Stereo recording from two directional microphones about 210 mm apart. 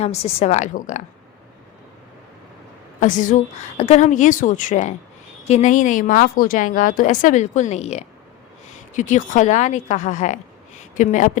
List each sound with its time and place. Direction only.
0.0 s a woman's voice: 30° left (ahead or behind)
3.0 s a woman's voice: 35° left (ahead or behind)